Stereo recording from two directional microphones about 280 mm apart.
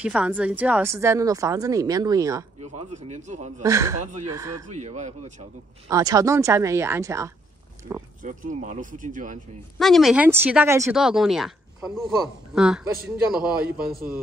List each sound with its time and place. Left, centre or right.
0.0 s a woman's voice: centre
2.6 s speech: right
3.6 s a woman's voice: centre
4.0 s speech: right
4.3 s a woman's voice: centre
4.6 s speech: right
5.9 s a woman's voice: centre
8.2 s speech: right
9.8 s speech: centre